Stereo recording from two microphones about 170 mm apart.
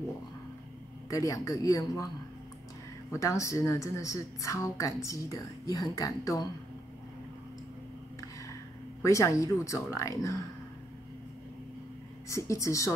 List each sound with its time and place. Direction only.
1.1 s a woman's voice: 20° left (ahead or behind)
3.1 s a woman's voice: 20° left (ahead or behind)
9.0 s speech: 20° left (ahead or behind)
12.3 s speech: 20° left (ahead or behind)